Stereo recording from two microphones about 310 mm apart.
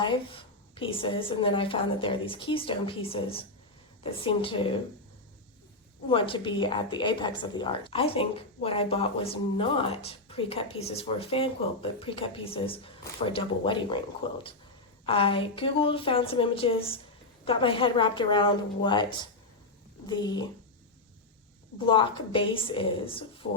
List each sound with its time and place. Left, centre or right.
0.0 s a woman's voice: centre
6.1 s a woman's voice: centre
21.8 s a woman's voice: centre